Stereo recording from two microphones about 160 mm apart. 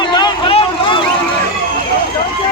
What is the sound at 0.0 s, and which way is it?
Vehicle, 25° left (ahead or behind).